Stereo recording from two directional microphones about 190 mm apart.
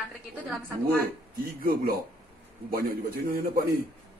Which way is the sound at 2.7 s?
50° right (ahead or behind).